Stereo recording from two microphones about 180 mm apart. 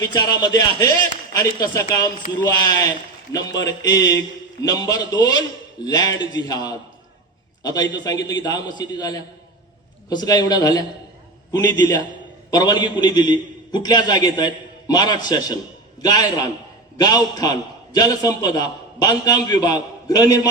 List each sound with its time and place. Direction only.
0.0 s a man's voice: 20° left (ahead or behind)
12.5 s a man's voice: 20° left (ahead or behind)